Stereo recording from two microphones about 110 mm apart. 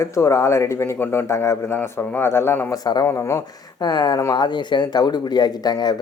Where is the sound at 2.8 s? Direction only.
35° left (ahead or behind).